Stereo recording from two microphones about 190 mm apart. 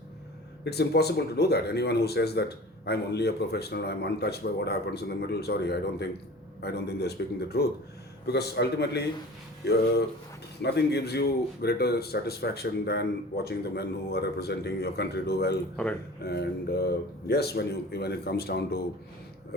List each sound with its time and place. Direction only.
0.6 s speech: 60° left (ahead or behind)
10.6 s speech: 60° left (ahead or behind)
15.7 s speech: 5° left (ahead or behind)
16.2 s speech: 60° left (ahead or behind)